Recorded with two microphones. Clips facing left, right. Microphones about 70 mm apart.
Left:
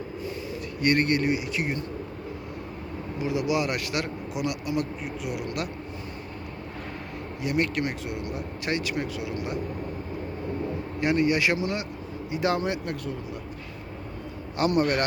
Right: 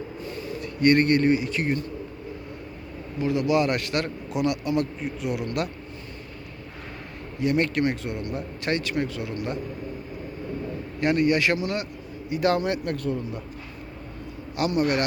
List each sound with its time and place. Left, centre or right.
0.3 s speech: centre
3.2 s a man's voice: centre
7.3 s a man's voice: centre
11.0 s a man's voice: centre
14.7 s a man's voice: left